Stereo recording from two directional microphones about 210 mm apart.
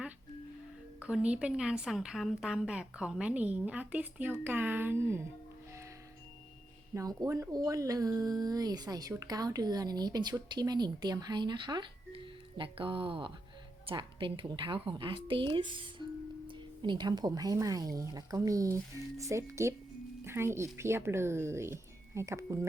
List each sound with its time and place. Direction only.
0.9 s a woman's voice: 5° right (ahead or behind)
6.9 s speech: 15° right (ahead or behind)